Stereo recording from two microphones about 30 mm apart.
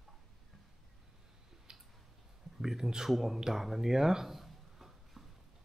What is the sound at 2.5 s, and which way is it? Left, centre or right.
Speech, centre.